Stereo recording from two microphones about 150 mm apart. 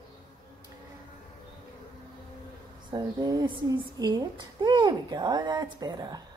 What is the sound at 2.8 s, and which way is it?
A woman's voice, 30° right (ahead or behind).